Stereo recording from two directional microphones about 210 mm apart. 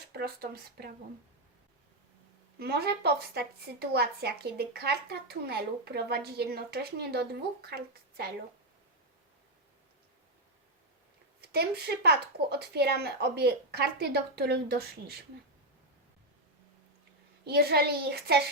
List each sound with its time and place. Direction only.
0.1 s speech: 50° right (ahead or behind)
2.6 s a woman's voice: 50° right (ahead or behind)
11.3 s speech: 50° right (ahead or behind)
17.4 s speech: 50° right (ahead or behind)